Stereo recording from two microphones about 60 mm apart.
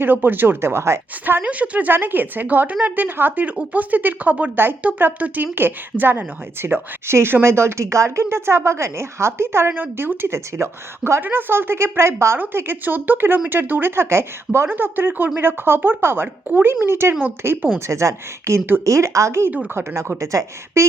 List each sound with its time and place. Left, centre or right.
0.0 s speech: right
1.2 s a woman's voice: right
11.2 s speech: right
12.4 s speech: right
14.7 s speech: right
17.7 s a woman's voice: right